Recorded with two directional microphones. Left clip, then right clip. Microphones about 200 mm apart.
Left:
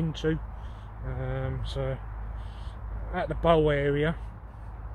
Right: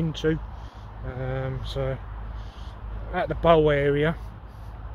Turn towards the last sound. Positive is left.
turn(degrees=0)  # may be behind; listen again after turning